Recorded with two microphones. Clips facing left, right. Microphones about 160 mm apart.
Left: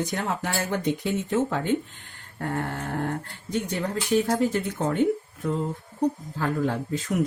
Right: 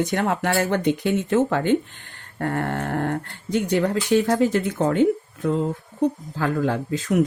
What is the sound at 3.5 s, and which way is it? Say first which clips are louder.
Speech: right 7 dB; 90° right.